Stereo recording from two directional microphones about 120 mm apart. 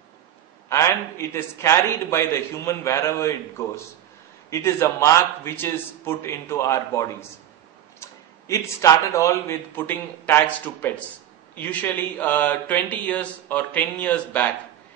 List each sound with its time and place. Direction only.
0.7 s a man's voice: 25° left (ahead or behind)